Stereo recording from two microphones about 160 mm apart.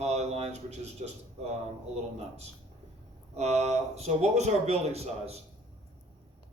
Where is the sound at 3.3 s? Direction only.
45° right (ahead or behind).